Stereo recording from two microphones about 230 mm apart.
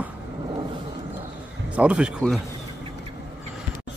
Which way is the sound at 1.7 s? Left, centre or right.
Centre.